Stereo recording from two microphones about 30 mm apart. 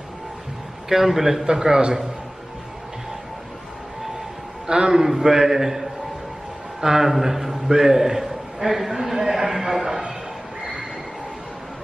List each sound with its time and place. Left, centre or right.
0.8 s a man's voice: centre
1.5 s a man's voice: right
4.6 s a man's voice: right
5.0 s a man's voice: centre